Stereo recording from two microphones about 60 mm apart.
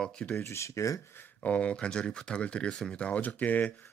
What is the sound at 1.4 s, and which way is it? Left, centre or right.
A man's voice, left.